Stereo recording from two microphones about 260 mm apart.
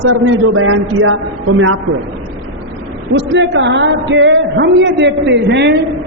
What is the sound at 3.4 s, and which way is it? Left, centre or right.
A woman's voice, right.